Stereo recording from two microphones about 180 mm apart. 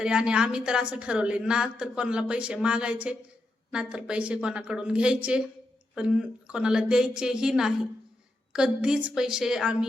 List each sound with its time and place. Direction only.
0.0 s a woman's voice: 5° right (ahead or behind)